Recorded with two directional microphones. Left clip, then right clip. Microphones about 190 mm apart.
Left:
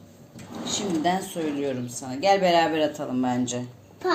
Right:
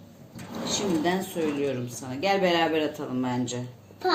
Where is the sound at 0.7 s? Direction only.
20° left (ahead or behind).